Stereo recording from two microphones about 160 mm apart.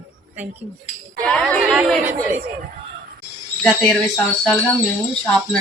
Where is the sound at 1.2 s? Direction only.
5° left (ahead or behind).